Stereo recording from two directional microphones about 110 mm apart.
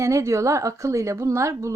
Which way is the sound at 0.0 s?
25° right (ahead or behind).